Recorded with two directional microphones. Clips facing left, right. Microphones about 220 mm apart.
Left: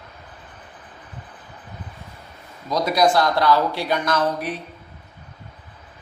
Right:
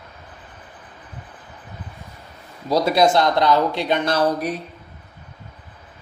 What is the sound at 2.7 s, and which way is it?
Speech, 30° right (ahead or behind).